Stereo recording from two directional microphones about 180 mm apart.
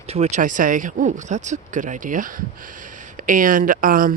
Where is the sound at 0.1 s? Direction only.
40° right (ahead or behind).